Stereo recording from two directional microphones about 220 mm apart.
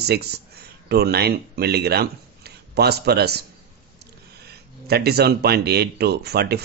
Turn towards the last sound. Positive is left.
turn(degrees=-45)  # may be behind; listen again after turning